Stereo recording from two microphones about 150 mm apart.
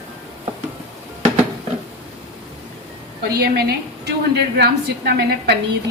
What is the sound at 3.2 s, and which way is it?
A woman's voice, 90° right.